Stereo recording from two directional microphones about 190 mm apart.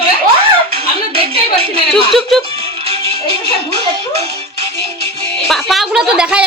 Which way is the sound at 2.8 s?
30° right (ahead or behind).